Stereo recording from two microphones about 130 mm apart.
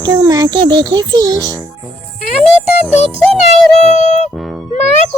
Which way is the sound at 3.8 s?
60° left (ahead or behind).